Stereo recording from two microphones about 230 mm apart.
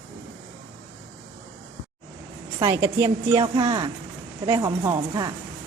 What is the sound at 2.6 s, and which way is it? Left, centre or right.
A woman's voice, centre.